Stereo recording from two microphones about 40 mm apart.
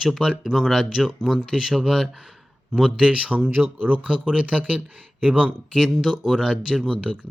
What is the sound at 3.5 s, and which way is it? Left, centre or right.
Speech, right.